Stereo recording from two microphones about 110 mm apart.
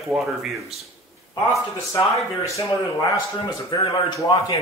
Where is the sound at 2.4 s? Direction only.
30° left (ahead or behind).